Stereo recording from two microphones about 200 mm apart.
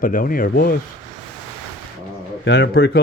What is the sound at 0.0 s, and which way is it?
Speech, 45° left (ahead or behind).